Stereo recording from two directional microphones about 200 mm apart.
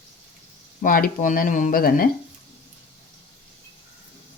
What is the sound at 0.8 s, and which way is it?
Speech, 45° left (ahead or behind).